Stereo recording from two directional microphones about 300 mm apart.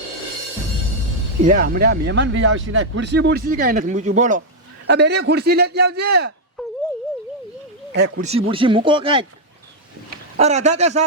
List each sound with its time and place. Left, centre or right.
1.4 s a man's voice: right
8.2 s speech: centre
10.3 s speech: right